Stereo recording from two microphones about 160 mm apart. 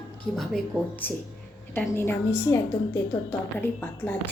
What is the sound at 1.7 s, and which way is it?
Speech, 15° left (ahead or behind).